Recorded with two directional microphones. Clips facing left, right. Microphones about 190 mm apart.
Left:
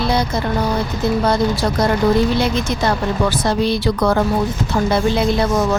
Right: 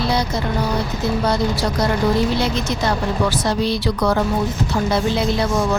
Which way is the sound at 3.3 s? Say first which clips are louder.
Left 2 dB; 55° left (ahead or behind).